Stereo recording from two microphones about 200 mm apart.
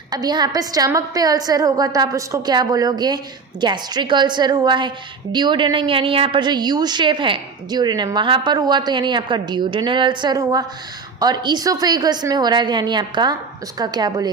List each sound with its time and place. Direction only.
0.1 s a woman's voice: 20° right (ahead or behind)